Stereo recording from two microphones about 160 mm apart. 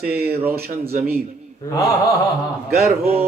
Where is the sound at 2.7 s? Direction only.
70° right (ahead or behind).